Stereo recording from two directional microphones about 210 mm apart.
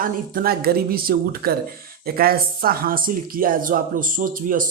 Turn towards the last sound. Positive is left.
turn(degrees=-40)  # may be behind; listen again after turning